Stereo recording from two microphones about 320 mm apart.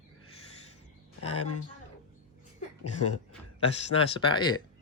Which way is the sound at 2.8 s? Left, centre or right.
Left.